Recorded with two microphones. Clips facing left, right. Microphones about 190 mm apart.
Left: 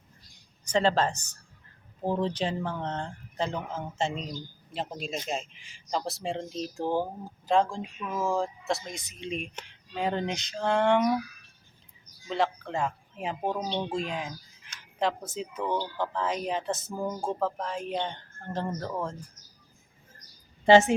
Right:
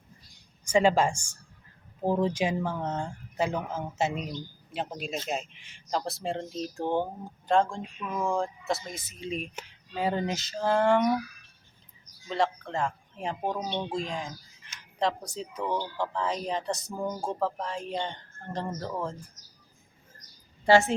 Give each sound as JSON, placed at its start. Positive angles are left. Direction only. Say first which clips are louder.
{"t": 0.6, "sound": "speech", "louder": "right 2 dB", "side_deg": -10}
{"t": 12.3, "sound": "speech", "louder": "even", "side_deg": 5}
{"t": 20.7, "sound": "a woman's voice", "louder": "left 3 dB", "side_deg": 20}